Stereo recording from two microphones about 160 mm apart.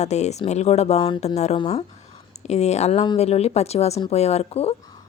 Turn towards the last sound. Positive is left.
turn(degrees=40)  # may be behind; listen again after turning